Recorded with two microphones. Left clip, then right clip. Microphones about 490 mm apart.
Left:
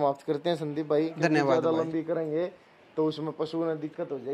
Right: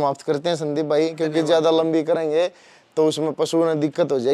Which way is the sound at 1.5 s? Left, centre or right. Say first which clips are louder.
Right 9 dB; right.